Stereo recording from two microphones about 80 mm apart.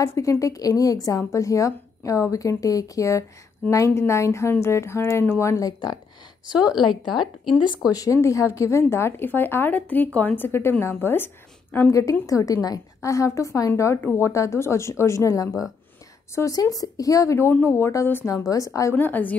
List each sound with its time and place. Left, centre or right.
0.0 s a woman's voice: left
5.7 s speech: left
7.1 s a woman's voice: centre
7.9 s speech: left
11.9 s a woman's voice: left
18.3 s a woman's voice: left
18.9 s speech: left